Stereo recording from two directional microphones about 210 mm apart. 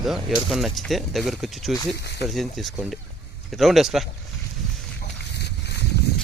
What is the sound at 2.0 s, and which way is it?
Speech, 50° left (ahead or behind).